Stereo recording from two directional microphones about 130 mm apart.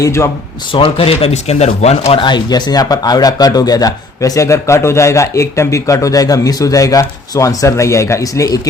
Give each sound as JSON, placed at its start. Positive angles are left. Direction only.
{"t": 0.0, "sound": "speech", "side_deg": 20}
{"t": 0.7, "sound": "speech", "side_deg": 45}
{"t": 2.2, "sound": "speech", "side_deg": 35}